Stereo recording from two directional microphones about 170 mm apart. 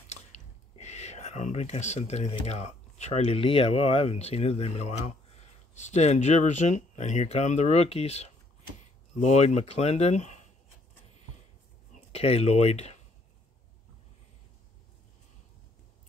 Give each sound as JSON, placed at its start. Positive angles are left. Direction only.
{"t": 0.1, "sound": "speech", "side_deg": 40}
{"t": 12.1, "sound": "speech", "side_deg": 35}